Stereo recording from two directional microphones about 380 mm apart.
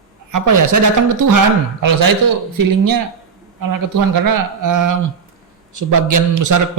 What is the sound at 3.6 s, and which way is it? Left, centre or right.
A man's voice, right.